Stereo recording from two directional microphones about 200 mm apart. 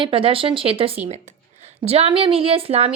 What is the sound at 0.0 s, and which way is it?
A woman's voice, 25° right (ahead or behind).